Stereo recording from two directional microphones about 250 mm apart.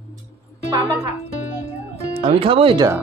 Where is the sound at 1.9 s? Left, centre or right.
Right.